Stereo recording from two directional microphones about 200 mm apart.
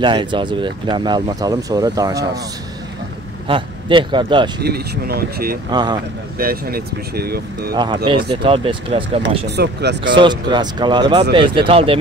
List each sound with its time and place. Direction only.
0.0 s speech: 25° right (ahead or behind)
3.4 s speech: 25° right (ahead or behind)
4.6 s speech: 50° right (ahead or behind)
5.7 s speech: 20° right (ahead or behind)
6.3 s speech: 50° right (ahead or behind)
7.7 s speech: 20° right (ahead or behind)
9.6 s speech: 55° right (ahead or behind)
10.1 s speech: 25° right (ahead or behind)